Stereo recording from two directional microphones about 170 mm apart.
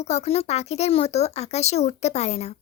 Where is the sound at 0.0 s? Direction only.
40° left (ahead or behind).